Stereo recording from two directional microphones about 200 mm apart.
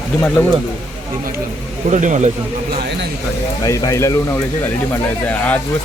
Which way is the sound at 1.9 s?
35° right (ahead or behind).